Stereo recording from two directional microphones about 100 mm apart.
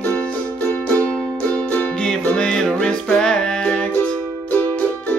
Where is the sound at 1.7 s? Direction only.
10° left (ahead or behind).